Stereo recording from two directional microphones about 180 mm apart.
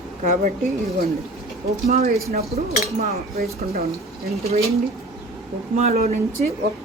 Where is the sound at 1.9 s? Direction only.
35° right (ahead or behind).